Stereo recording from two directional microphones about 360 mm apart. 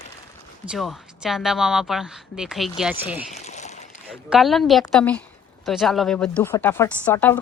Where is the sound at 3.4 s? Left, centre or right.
Centre.